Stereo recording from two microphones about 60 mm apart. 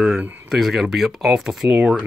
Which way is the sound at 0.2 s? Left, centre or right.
Right.